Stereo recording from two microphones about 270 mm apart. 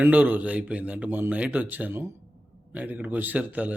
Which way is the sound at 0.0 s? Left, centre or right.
Centre.